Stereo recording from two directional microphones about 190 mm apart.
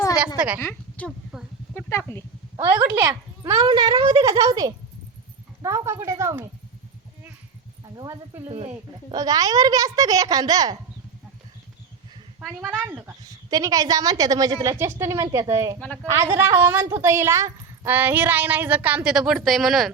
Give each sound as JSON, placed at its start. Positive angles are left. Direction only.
{"t": 0.3, "sound": "speech", "side_deg": -5}
{"t": 0.6, "sound": "speech", "side_deg": 5}
{"t": 2.9, "sound": "a woman's voice", "side_deg": -10}
{"t": 7.9, "sound": "a woman's voice", "side_deg": -20}
{"t": 8.4, "sound": "speech", "side_deg": -35}
{"t": 9.1, "sound": "a woman's voice", "side_deg": -20}
{"t": 12.4, "sound": "speech", "side_deg": -5}
{"t": 13.2, "sound": "a woman's voice", "side_deg": -20}